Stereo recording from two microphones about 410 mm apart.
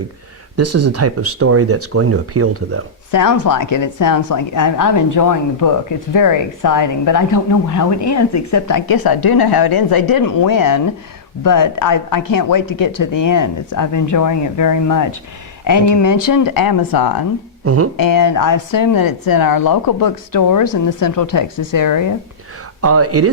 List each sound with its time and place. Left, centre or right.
0.5 s speech: right
3.1 s a woman's voice: left
22.8 s speech: right